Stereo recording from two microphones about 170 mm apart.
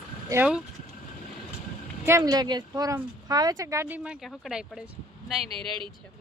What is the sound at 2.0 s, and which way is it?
Speech, 20° right (ahead or behind).